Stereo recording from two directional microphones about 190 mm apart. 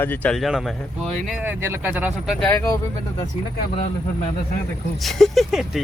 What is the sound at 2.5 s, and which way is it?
Speech, 15° left (ahead or behind).